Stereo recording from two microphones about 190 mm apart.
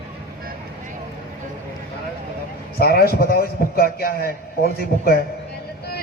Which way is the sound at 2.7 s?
55° left (ahead or behind).